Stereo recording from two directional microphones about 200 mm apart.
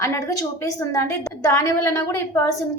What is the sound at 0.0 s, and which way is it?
A woman's voice, 15° left (ahead or behind).